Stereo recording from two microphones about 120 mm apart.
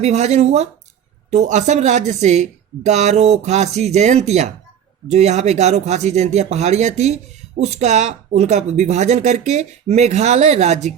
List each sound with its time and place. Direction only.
0.0 s a woman's voice: 70° right (ahead or behind)
1.3 s a woman's voice: 80° right